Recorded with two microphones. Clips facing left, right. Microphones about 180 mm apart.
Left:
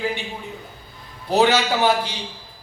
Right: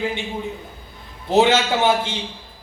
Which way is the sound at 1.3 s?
25° right (ahead or behind).